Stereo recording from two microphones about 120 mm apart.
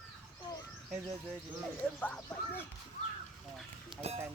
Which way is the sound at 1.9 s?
15° left (ahead or behind).